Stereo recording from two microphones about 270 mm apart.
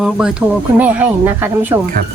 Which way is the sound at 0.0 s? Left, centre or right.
Centre.